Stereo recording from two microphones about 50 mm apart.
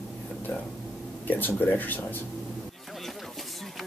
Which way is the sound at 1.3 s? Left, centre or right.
Left.